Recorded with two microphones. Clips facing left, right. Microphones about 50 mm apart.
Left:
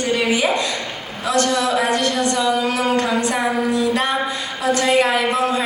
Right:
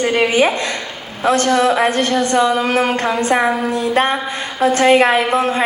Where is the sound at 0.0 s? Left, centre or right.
Right.